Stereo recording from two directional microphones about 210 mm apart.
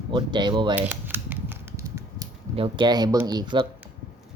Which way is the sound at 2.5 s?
25° right (ahead or behind).